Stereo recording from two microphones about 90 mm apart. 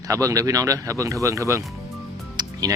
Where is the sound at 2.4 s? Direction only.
45° right (ahead or behind).